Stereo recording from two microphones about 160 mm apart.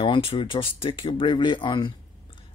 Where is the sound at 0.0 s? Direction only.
35° left (ahead or behind).